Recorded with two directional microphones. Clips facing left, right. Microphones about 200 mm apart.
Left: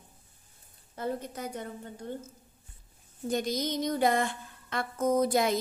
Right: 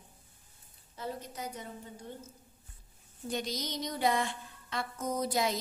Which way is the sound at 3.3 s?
50° left (ahead or behind).